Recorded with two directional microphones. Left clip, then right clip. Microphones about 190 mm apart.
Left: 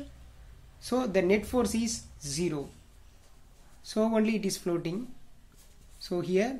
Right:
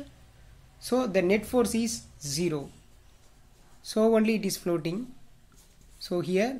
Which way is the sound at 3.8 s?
20° right (ahead or behind).